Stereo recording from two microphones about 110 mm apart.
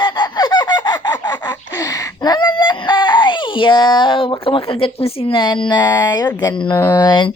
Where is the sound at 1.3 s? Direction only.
35° left (ahead or behind); by 5.0 s 55° left (ahead or behind).